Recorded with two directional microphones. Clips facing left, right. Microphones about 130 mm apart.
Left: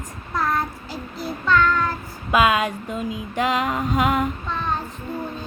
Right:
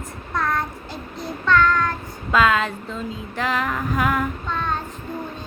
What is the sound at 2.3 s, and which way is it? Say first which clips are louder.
Female singing: even; 15° left (ahead or behind).